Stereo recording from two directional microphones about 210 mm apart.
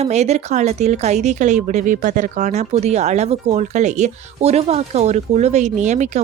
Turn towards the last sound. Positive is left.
turn(degrees=-35)  # may be behind; listen again after turning